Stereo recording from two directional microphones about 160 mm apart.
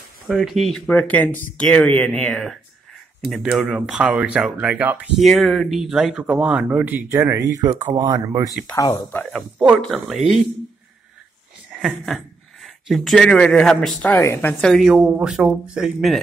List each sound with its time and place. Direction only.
0.3 s speech: centre (ahead or behind); by 8.5 s 25° right (ahead or behind)
8.7 s speech: 25° left (ahead or behind)
9.3 s speech: centre (ahead or behind)
11.7 s a sound: 10° right (ahead or behind)
12.6 s speech: centre (ahead or behind)
14.1 s speech: 15° left (ahead or behind)
14.6 s speech: centre (ahead or behind)